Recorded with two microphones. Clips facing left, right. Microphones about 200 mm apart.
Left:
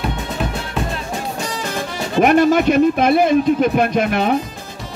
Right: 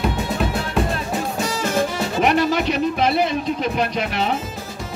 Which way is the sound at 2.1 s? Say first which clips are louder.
Left 6 dB; 50° left (ahead or behind).